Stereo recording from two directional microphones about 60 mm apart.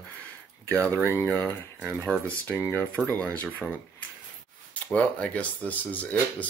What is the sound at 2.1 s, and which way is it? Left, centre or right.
Speech, left.